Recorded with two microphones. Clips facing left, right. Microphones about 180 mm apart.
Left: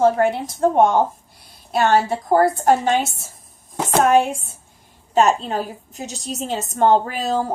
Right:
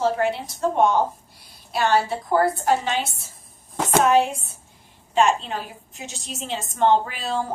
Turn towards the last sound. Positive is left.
turn(degrees=40)  # may be behind; listen again after turning